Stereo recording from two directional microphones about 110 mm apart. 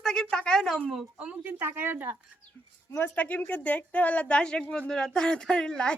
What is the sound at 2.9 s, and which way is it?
A woman's voice, 15° left (ahead or behind).